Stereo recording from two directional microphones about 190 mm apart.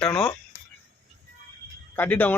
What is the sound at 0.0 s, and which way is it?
Speech, 5° left (ahead or behind).